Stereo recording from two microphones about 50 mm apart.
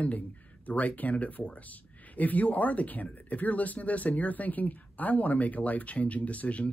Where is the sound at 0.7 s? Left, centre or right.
Left.